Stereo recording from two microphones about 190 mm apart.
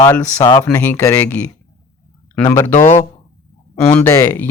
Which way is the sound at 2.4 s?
15° left (ahead or behind).